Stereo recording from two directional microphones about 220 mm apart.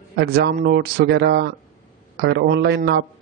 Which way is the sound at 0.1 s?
45° right (ahead or behind).